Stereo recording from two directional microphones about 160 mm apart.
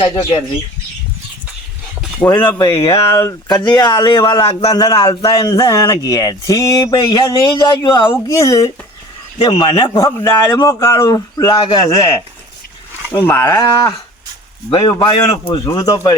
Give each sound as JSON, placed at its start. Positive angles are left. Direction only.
{"t": 0.0, "sound": "a man's voice", "side_deg": 25}
{"t": 2.5, "sound": "a man's voice", "side_deg": 20}
{"t": 4.7, "sound": "a man's voice", "side_deg": 25}
{"t": 13.7, "sound": "a man's voice", "side_deg": 25}